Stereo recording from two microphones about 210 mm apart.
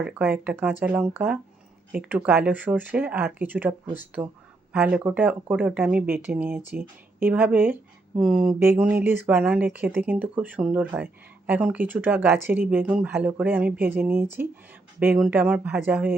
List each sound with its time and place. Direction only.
0.0 s speech: 5° right (ahead or behind)